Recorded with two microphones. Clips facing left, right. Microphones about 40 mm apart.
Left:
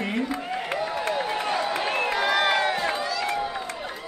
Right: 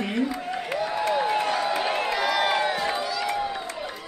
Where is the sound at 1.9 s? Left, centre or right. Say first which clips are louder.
Left 1 dB; left.